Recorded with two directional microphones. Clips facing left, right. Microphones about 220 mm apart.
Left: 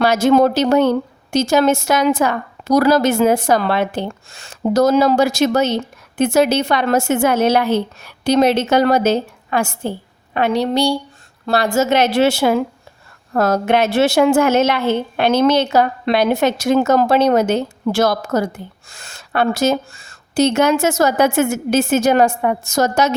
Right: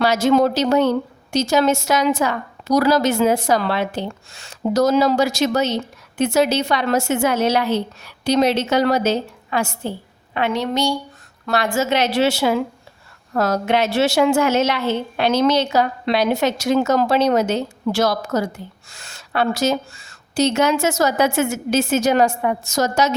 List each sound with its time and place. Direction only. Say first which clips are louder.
0.0 s a woman's voice: left 3 dB; 50° left (ahead or behind)
10.3 s a woman's voice: left 4 dB; 40° left (ahead or behind); by 23.1 s 55° left (ahead or behind)